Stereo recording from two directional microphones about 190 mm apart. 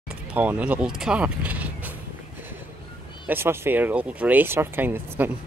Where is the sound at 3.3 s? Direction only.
10° right (ahead or behind).